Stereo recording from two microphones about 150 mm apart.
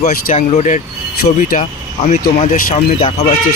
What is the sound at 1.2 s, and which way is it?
Speech, 65° left (ahead or behind).